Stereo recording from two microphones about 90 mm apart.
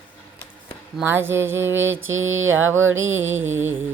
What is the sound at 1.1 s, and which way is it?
Music, 25° right (ahead or behind).